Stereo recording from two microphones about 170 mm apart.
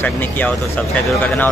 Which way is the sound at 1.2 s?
10° left (ahead or behind).